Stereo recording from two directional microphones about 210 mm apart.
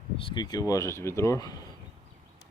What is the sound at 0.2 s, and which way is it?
Speech, 20° left (ahead or behind).